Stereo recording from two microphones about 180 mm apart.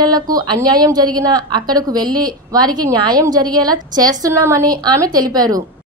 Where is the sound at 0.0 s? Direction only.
20° right (ahead or behind).